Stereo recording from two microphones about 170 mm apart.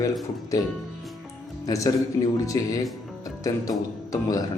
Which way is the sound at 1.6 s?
20° left (ahead or behind).